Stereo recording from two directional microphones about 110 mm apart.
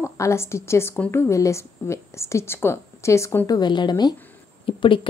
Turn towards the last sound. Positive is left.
turn(degrees=50)  # may be behind; listen again after turning